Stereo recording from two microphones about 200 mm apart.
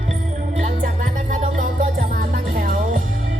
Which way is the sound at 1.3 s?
40° right (ahead or behind).